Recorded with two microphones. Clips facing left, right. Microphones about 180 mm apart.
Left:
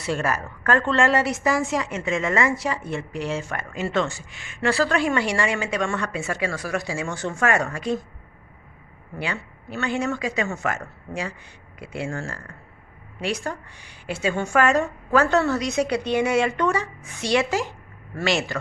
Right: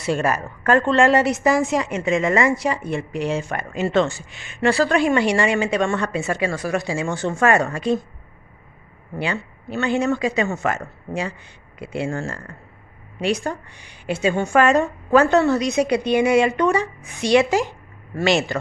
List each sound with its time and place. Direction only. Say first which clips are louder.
0.0 s a woman's voice: right 4 dB; 15° right (ahead or behind)
9.1 s a woman's voice: right 5 dB; 25° right (ahead or behind)